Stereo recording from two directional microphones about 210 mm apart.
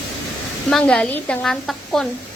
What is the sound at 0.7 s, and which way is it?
Speech, 5° left (ahead or behind).